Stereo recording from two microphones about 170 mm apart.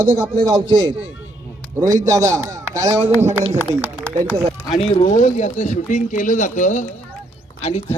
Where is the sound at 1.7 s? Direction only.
20° right (ahead or behind).